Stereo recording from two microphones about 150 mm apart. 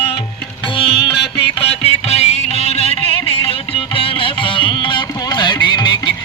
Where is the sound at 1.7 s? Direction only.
45° left (ahead or behind).